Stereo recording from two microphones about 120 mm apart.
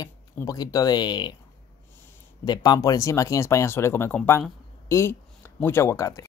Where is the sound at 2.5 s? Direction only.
35° left (ahead or behind).